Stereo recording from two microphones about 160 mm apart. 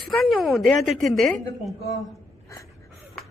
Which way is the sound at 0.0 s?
Centre (ahead or behind).